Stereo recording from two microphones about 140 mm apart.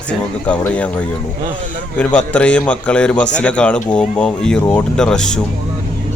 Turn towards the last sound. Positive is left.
turn(degrees=5)  # may be behind; listen again after turning